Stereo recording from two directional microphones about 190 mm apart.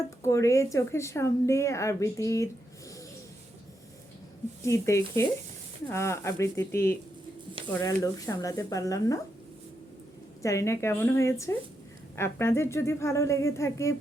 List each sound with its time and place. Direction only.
0.2 s speech: 15° left (ahead or behind)
4.6 s speech: 15° left (ahead or behind)
10.4 s speech: 15° left (ahead or behind)